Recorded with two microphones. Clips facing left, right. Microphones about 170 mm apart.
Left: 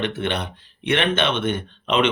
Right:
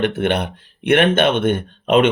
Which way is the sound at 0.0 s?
55° right (ahead or behind).